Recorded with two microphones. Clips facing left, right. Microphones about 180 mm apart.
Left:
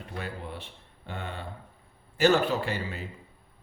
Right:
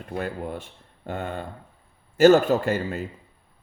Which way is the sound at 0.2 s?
45° right (ahead or behind).